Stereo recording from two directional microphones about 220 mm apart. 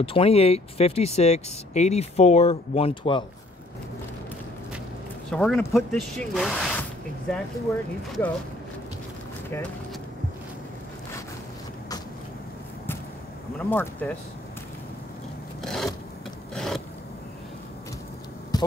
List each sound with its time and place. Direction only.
0.0 s speech: 25° left (ahead or behind)
5.3 s speech: 5° left (ahead or behind)
13.6 s speech: 10° left (ahead or behind)
15.6 s filing: centre (ahead or behind)
18.5 s a sound: 15° left (ahead or behind)